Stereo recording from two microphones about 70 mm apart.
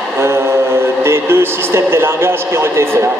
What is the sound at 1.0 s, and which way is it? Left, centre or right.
A man's voice, right.